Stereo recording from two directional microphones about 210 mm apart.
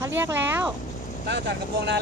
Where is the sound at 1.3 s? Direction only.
55° right (ahead or behind).